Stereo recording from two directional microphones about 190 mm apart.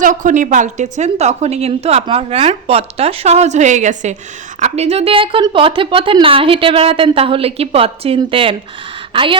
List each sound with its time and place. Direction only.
0.0 s a woman's voice: 45° right (ahead or behind); by 9.4 s 25° right (ahead or behind)